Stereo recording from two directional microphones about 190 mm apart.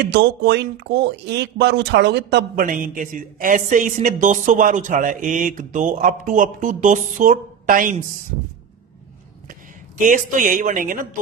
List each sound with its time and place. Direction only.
0.0 s speech: 65° right (ahead or behind); by 7.9 s 45° right (ahead or behind)
10.0 s speech: 45° right (ahead or behind)